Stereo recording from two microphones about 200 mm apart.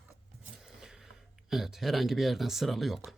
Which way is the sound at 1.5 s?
Centre (ahead or behind).